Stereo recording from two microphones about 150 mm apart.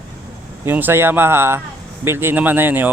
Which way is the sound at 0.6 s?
15° right (ahead or behind).